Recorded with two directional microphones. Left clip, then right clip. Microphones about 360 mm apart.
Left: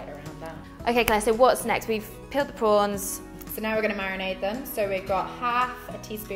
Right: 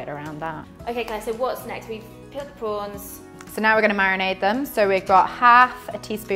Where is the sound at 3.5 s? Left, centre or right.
Centre.